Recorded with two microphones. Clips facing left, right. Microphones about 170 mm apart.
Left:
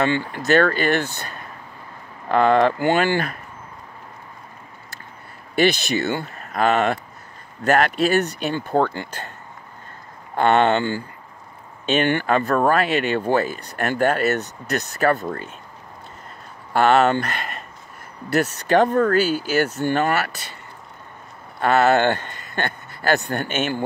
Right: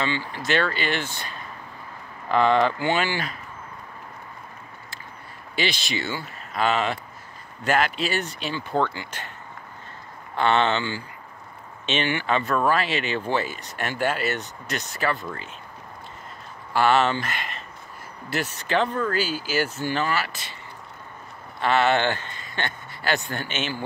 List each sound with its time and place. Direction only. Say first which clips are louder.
0.0 s speech: left 6 dB; 55° left (ahead or behind)
5.6 s speech: left 9 dB; 50° left (ahead or behind)
10.3 s speech: left 5 dB; 50° left (ahead or behind)
13.2 s speech: left 6 dB; 45° left (ahead or behind)
16.7 s speech: left 4 dB; 45° left (ahead or behind)
21.5 s speech: left 4 dB; 45° left (ahead or behind)